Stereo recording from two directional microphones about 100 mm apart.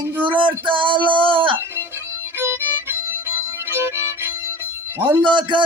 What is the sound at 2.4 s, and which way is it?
Violin, 25° right (ahead or behind).